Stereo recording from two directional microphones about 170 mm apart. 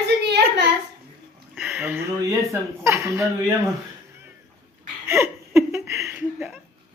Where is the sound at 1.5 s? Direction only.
5° right (ahead or behind).